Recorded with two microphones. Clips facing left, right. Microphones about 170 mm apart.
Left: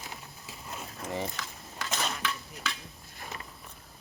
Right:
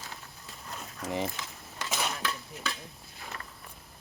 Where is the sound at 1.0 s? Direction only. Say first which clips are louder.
Right 2 dB; 20° right (ahead or behind).